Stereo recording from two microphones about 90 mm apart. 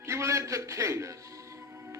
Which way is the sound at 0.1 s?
35° right (ahead or behind).